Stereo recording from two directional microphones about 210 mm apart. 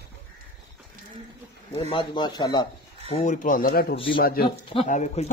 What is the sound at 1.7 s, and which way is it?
Speech, 25° left (ahead or behind).